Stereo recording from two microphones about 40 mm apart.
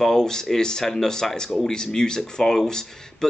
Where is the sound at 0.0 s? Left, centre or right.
Centre.